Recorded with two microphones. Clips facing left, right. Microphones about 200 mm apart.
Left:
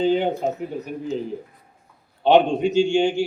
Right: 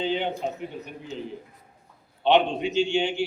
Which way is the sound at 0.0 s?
45° left (ahead or behind).